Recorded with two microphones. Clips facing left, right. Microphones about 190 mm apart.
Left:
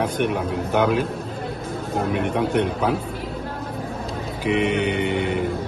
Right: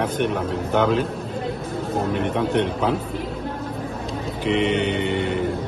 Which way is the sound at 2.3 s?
5° left (ahead or behind).